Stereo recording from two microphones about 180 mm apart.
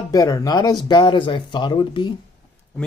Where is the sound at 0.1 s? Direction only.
20° left (ahead or behind).